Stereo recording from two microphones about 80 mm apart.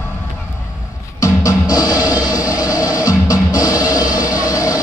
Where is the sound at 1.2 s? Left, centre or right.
Left.